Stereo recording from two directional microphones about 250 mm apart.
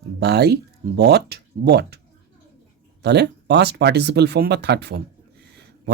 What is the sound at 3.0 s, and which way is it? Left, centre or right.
Speech, right.